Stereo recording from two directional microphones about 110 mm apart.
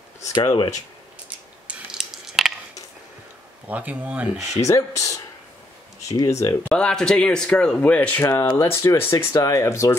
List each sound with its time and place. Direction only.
0.2 s speech: 35° left (ahead or behind)
1.7 s a sound: 5° right (ahead or behind)
3.6 s speech: 15° right (ahead or behind)
4.6 s speech: 30° left (ahead or behind)
6.6 s speech: 10° left (ahead or behind)
8.2 s speech: 30° left (ahead or behind)